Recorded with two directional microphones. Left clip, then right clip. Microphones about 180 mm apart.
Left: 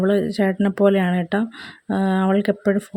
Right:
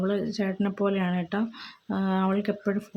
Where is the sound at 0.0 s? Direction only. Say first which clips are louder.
Left 9 dB; 35° left (ahead or behind).